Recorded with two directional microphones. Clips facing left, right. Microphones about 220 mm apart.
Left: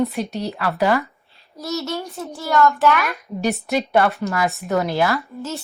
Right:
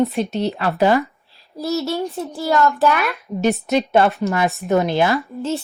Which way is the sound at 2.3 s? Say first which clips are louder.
Even; 35° right (ahead or behind).